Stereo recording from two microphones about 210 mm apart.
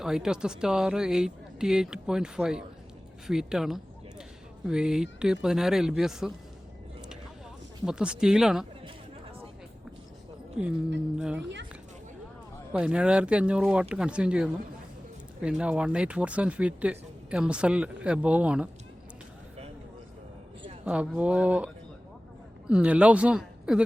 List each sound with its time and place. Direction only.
0.0 s speech: 5° right (ahead or behind)
7.9 s speech: 5° right (ahead or behind)
10.6 s speech: 5° right (ahead or behind)
12.7 s speech: 5° right (ahead or behind)
20.8 s speech: 5° right (ahead or behind)
22.7 s speech: 5° right (ahead or behind)